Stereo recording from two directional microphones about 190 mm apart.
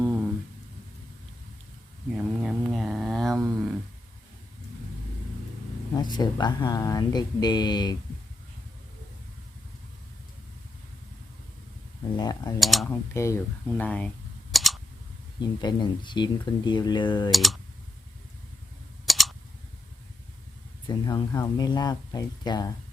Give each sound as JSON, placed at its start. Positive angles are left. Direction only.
{"t": 0.0, "sound": "a sound", "side_deg": -5}
{"t": 2.1, "sound": "mantra", "side_deg": 0}
{"t": 5.9, "sound": "speech", "side_deg": 20}
{"t": 12.1, "sound": "speech", "side_deg": 20}
{"t": 12.5, "sound": "speech", "side_deg": 0}
{"t": 12.9, "sound": "speech", "side_deg": 15}
{"t": 14.5, "sound": "a sound", "side_deg": 0}
{"t": 15.4, "sound": "speech", "side_deg": 25}
{"t": 17.3, "sound": "speech", "side_deg": 0}
{"t": 19.0, "sound": "typing", "side_deg": 0}
{"t": 20.8, "sound": "speech", "side_deg": 25}